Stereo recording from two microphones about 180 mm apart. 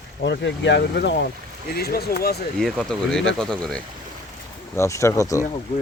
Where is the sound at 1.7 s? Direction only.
60° left (ahead or behind).